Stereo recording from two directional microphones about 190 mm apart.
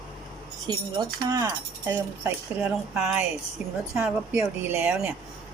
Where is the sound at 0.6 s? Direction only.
20° right (ahead or behind).